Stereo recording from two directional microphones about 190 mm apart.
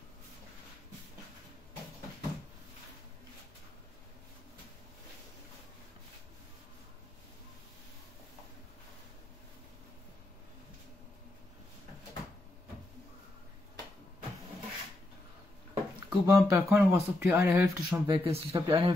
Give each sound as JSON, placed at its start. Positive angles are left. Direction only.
{"t": 15.7, "sound": "a sound", "side_deg": -20}
{"t": 16.6, "sound": "speech", "side_deg": -5}
{"t": 18.0, "sound": "speech", "side_deg": -30}